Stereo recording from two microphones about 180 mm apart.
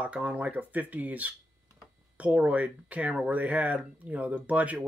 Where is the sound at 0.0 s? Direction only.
5° right (ahead or behind).